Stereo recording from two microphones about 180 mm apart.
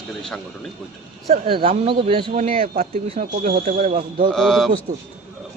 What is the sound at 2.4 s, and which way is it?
Speech, 50° right (ahead or behind).